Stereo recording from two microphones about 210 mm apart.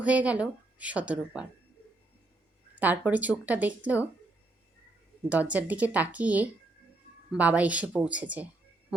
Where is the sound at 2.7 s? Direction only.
10° right (ahead or behind).